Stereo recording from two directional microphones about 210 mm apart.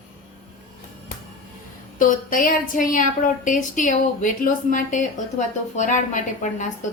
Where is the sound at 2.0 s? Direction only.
40° left (ahead or behind).